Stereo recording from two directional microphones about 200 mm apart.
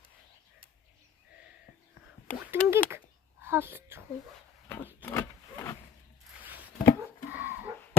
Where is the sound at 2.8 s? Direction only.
10° right (ahead or behind).